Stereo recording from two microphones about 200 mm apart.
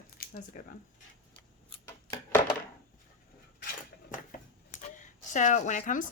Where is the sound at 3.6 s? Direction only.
45° left (ahead or behind).